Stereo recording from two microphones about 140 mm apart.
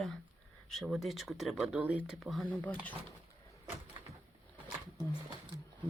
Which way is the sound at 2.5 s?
10° left (ahead or behind).